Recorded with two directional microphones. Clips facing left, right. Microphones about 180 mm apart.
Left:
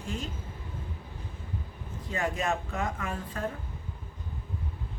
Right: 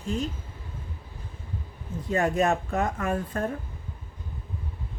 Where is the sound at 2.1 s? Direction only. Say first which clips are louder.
Right 7 dB; 45° right (ahead or behind).